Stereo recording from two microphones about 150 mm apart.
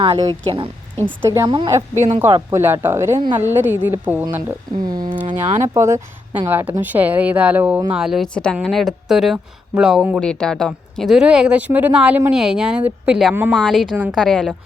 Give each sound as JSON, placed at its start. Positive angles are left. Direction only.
{"t": 0.0, "sound": "speech", "side_deg": -30}
{"t": 1.0, "sound": "speech", "side_deg": -20}
{"t": 1.5, "sound": "speech", "side_deg": -30}
{"t": 2.2, "sound": "speech", "side_deg": -15}
{"t": 4.9, "sound": "speech", "side_deg": -25}
{"t": 5.3, "sound": "speech", "side_deg": -15}
{"t": 10.2, "sound": "speech", "side_deg": 5}
{"t": 13.6, "sound": "speech", "side_deg": 5}